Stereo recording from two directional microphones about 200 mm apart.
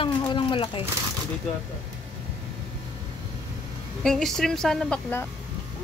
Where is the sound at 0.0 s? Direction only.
25° left (ahead or behind).